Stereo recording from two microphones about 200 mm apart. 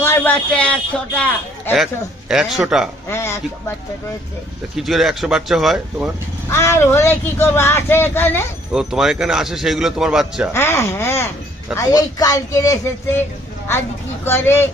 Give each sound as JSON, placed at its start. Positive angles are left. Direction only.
{"t": 0.0, "sound": "a man's voice", "side_deg": 10}
{"t": 3.1, "sound": "speech", "side_deg": 10}
{"t": 4.8, "sound": "a man's voice", "side_deg": 0}
{"t": 6.5, "sound": "speech", "side_deg": 15}
{"t": 8.7, "sound": "a man's voice", "side_deg": 0}
{"t": 10.5, "sound": "speech", "side_deg": 15}
{"t": 14.3, "sound": "speech", "side_deg": 10}